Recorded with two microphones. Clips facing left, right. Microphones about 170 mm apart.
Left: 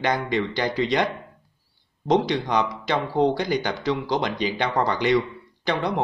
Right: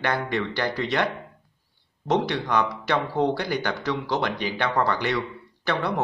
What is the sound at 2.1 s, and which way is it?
A man's voice, 15° left (ahead or behind).